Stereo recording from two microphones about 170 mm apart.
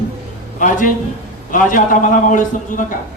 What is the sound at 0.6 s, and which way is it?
A man's voice, 50° left (ahead or behind).